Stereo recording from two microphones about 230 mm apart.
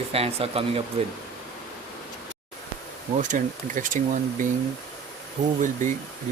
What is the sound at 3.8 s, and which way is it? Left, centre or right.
Speech, right.